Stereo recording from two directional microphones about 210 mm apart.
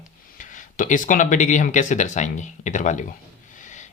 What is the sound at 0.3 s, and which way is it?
Speech, 35° left (ahead or behind).